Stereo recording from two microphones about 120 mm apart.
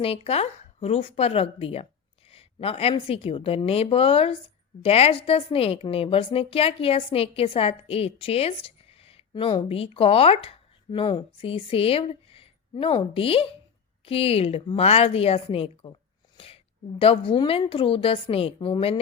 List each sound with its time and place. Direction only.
0.0 s a woman's voice: 55° left (ahead or behind)
10.9 s a woman's voice: 45° left (ahead or behind)
17.0 s a woman's voice: 50° left (ahead or behind)